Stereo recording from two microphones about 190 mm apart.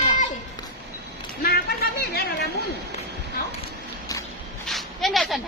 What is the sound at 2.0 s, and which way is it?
Speech, 55° left (ahead or behind).